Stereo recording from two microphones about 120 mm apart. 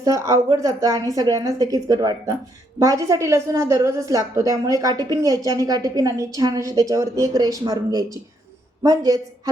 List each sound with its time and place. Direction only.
0.0 s a woman's voice: 25° right (ahead or behind)